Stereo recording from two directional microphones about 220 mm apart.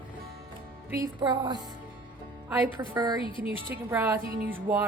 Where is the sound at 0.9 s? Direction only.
15° right (ahead or behind).